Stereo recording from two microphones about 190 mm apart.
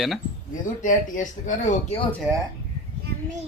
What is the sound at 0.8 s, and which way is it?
Speech, 40° left (ahead or behind).